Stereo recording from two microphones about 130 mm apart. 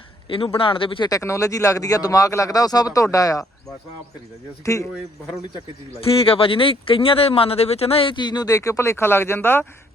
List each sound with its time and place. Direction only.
0.3 s speech: 45° left (ahead or behind)
1.1 s speech: 25° left (ahead or behind)
4.6 s speech: 25° left (ahead or behind)
6.2 s speech: 45° left (ahead or behind); by 9.6 s 15° left (ahead or behind)